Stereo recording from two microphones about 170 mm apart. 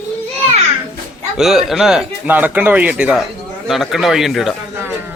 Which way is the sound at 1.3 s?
Centre (ahead or behind).